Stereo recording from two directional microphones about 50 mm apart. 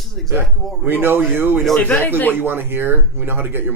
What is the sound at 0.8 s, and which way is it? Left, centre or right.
Speech, right.